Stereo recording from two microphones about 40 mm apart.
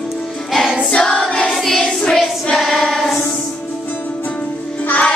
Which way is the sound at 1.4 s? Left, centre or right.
Centre.